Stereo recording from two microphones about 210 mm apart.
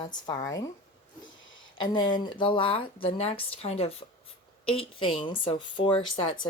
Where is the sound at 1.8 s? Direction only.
20° left (ahead or behind).